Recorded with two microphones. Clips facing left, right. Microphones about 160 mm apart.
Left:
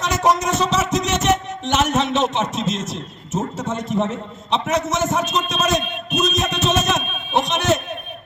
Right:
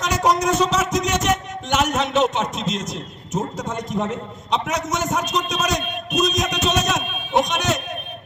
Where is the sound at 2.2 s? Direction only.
10° right (ahead or behind).